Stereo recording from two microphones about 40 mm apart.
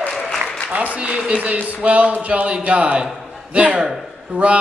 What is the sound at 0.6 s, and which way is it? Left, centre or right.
A man's voice, right.